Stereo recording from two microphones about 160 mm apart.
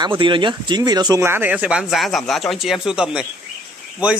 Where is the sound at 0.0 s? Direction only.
30° right (ahead or behind).